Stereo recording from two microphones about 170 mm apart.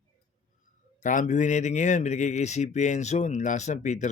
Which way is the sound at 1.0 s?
45° left (ahead or behind).